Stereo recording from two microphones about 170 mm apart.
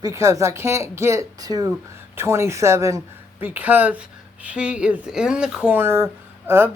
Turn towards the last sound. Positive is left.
turn(degrees=-15)  # may be behind; listen again after turning